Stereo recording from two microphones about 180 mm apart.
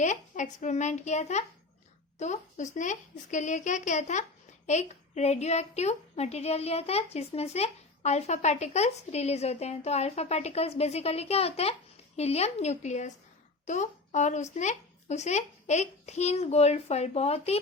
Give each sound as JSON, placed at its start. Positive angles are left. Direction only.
{"t": 0.0, "sound": "speech", "side_deg": 40}